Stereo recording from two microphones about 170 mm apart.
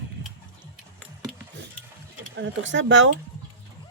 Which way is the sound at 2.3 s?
90° right.